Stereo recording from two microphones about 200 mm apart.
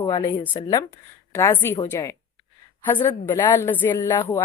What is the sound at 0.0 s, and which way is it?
Speech, 20° left (ahead or behind).